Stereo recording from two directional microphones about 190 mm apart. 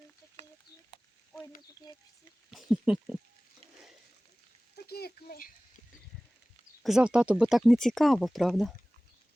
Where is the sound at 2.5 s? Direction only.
Centre (ahead or behind).